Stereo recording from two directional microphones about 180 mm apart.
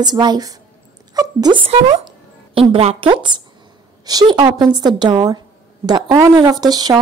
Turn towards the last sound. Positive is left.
turn(degrees=-20)  # may be behind; listen again after turning